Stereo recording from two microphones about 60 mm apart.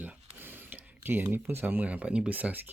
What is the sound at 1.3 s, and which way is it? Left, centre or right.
Speech, right.